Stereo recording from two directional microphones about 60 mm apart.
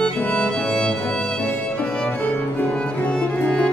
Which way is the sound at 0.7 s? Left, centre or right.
Centre.